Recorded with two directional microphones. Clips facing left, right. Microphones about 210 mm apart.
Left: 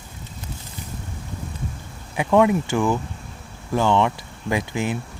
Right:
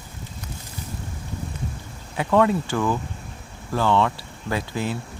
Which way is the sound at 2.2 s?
15° left (ahead or behind).